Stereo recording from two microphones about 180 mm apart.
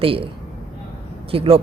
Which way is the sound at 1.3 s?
30° right (ahead or behind).